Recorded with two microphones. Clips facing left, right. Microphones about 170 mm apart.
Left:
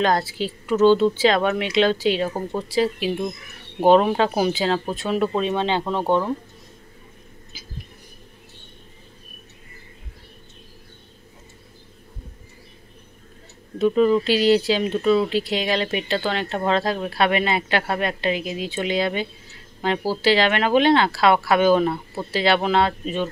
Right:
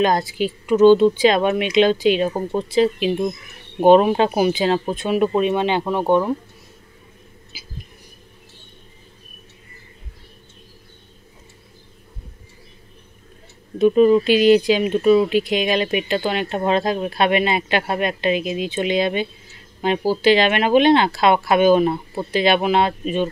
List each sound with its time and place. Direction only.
0.0 s speech: 15° right (ahead or behind)
7.5 s a sound: 10° right (ahead or behind)
13.7 s speech: 20° right (ahead or behind)